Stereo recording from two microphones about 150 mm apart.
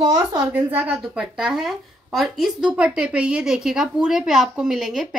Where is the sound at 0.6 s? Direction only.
10° right (ahead or behind).